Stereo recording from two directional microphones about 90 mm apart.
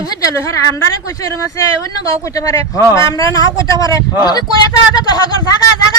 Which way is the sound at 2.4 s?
35° left (ahead or behind).